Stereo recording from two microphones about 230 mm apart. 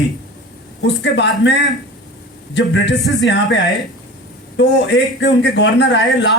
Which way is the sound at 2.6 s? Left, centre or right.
Left.